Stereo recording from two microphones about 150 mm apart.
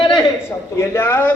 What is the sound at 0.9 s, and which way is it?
Speech, 15° left (ahead or behind).